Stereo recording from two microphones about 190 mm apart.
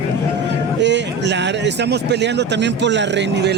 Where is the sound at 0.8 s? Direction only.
65° right (ahead or behind).